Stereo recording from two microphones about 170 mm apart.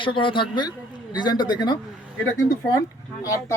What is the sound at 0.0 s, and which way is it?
Speech, 30° left (ahead or behind).